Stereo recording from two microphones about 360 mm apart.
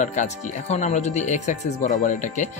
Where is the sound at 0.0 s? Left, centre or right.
Centre.